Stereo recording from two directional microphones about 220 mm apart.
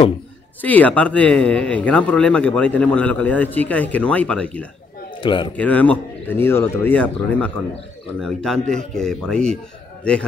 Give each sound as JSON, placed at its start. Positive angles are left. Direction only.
{"t": 0.6, "sound": "speech", "side_deg": 5}
{"t": 5.2, "sound": "speech", "side_deg": 20}
{"t": 5.6, "sound": "speech", "side_deg": 5}